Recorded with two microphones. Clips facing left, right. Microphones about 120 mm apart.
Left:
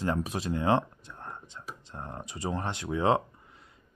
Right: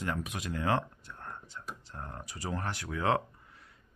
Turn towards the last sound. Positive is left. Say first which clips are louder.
# left 4 dB
turn(degrees=20)  # may be behind; listen again after turning